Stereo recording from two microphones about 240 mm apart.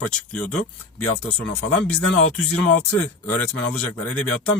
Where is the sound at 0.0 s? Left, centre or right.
Centre.